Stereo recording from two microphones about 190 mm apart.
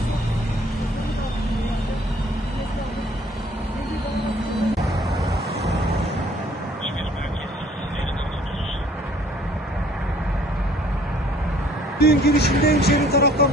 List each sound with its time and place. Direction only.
4.8 s vehicle: centre (ahead or behind)
11.9 s speech: 55° left (ahead or behind)